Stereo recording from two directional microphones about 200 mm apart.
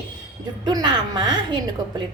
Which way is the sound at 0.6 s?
20° right (ahead or behind).